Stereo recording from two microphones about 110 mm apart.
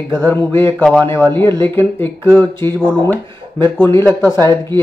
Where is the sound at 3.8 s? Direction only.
20° left (ahead or behind).